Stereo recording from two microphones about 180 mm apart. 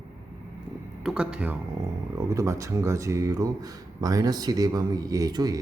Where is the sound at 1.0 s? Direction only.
5° right (ahead or behind).